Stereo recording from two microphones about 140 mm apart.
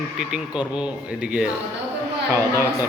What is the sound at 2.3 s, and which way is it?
Speech, 20° right (ahead or behind).